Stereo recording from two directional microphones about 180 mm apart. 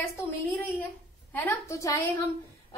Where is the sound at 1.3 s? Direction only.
15° left (ahead or behind).